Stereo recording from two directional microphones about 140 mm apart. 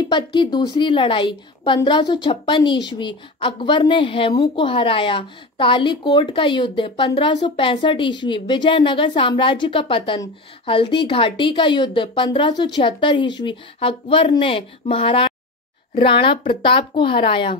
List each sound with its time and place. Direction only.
0.1 s speech: 35° left (ahead or behind)